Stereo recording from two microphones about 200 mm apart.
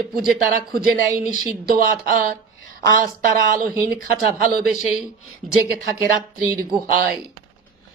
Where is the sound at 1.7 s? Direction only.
45° right (ahead or behind).